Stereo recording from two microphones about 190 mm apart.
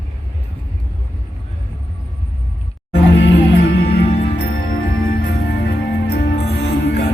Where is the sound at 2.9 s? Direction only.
65° left (ahead or behind).